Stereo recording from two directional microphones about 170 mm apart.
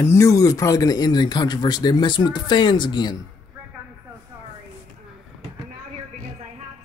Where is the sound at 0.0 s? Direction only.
15° left (ahead or behind).